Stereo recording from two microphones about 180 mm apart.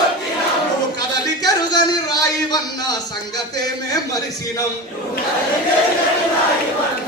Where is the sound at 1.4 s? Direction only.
20° left (ahead or behind).